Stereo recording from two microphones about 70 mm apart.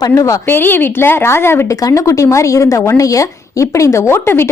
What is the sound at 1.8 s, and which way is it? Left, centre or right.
A woman's voice, left.